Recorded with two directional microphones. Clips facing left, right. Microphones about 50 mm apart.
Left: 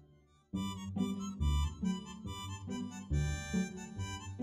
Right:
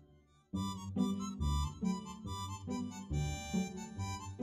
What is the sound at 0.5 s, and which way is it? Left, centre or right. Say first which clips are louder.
Music: right 1 dB; left.